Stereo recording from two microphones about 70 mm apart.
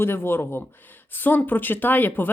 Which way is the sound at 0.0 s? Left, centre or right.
Left.